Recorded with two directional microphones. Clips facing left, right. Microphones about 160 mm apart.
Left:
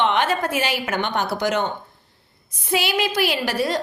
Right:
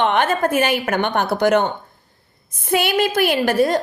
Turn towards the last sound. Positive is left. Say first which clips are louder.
# right 6 dB
turn(degrees=-50)  # may be behind; listen again after turning